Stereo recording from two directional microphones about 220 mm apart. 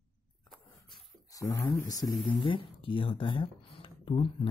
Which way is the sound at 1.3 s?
15° left (ahead or behind).